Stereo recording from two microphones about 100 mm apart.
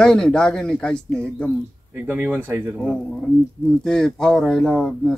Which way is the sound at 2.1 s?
20° right (ahead or behind).